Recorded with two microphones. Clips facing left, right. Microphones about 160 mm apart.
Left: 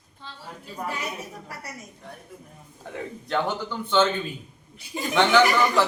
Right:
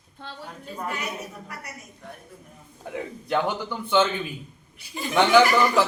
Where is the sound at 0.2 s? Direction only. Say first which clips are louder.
Right 3 dB; 60° right (ahead or behind).